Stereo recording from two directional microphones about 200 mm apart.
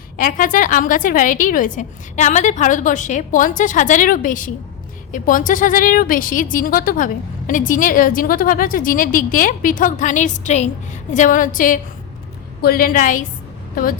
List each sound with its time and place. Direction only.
0.2 s a woman's voice: 45° left (ahead or behind)